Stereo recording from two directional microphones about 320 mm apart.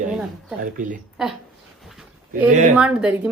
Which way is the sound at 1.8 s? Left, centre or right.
Centre.